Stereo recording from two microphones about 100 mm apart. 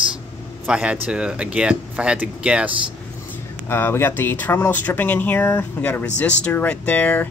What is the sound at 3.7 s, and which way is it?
Speech, 25° left (ahead or behind).